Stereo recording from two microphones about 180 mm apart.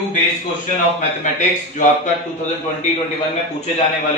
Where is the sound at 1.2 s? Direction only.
40° left (ahead or behind).